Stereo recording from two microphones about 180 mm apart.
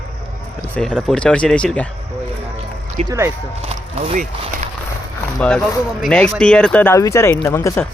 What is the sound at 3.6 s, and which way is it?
Speech, 35° right (ahead or behind).